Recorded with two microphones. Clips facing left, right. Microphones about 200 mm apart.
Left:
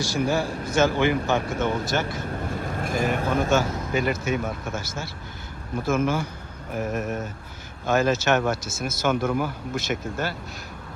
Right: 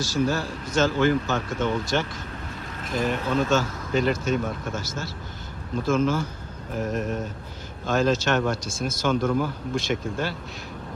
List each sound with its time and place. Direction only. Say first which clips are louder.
0.0 s speech: left 1 dB; 15° left (ahead or behind)
2.3 s boat: left 7 dB; 50° left (ahead or behind)
3.1 s speech: right 1 dB; 50° left (ahead or behind)
3.5 s speech: left 1 dB; 10° left (ahead or behind)